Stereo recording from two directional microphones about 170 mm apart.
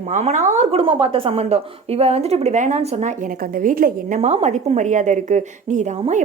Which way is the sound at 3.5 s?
55° right (ahead or behind).